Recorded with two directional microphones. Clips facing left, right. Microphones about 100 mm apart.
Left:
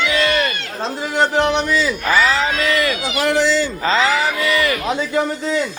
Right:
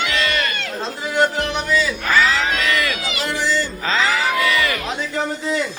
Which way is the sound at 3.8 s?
5° left (ahead or behind).